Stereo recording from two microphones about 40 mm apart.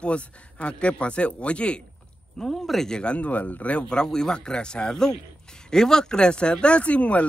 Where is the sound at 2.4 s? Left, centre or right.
Centre.